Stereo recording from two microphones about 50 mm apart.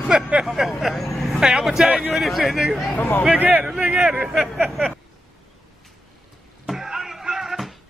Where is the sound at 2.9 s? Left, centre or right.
Left.